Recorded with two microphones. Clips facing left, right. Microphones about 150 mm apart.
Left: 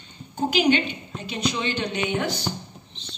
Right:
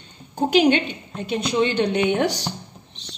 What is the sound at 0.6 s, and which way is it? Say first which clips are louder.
A woman's voice: right 4 dB; 55° right (ahead or behind).